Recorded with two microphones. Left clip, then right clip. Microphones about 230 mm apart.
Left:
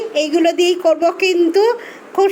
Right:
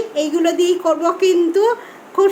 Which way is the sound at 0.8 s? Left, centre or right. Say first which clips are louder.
Left 3 dB; centre.